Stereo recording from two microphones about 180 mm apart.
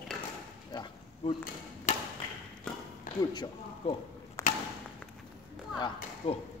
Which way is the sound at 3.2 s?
25° left (ahead or behind).